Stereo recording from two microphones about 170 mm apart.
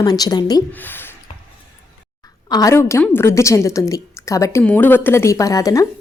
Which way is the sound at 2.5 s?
20° left (ahead or behind).